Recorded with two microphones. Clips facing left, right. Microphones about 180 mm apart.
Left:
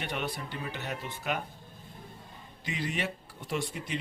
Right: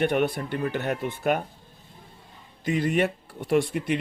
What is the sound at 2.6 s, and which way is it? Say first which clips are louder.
Speech: right 11 dB; 50° right (ahead or behind).